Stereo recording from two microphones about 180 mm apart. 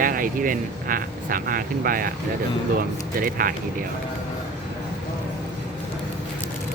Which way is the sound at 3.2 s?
50° right (ahead or behind).